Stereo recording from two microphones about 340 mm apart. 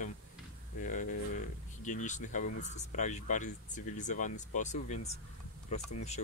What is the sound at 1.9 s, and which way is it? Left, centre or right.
Speech, left.